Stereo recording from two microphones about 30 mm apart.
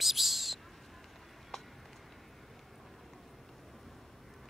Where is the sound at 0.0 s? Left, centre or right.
Centre.